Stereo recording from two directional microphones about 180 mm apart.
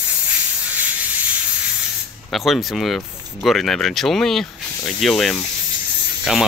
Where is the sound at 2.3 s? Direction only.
Centre (ahead or behind).